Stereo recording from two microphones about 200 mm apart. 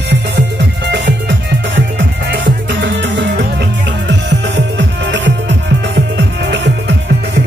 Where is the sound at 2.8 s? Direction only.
65° right (ahead or behind).